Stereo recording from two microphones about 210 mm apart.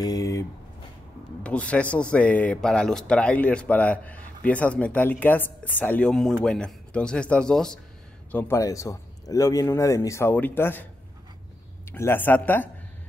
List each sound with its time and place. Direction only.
0.0 s a sound: 15° left (ahead or behind)
1.4 s a man's voice: 5° left (ahead or behind)
11.9 s a man's voice: 10° left (ahead or behind)